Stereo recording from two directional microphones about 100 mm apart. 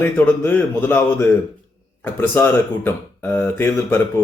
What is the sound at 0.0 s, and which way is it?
Speech, 20° left (ahead or behind).